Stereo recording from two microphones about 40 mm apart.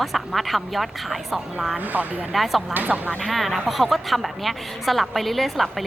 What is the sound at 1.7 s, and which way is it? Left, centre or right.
Speech, right.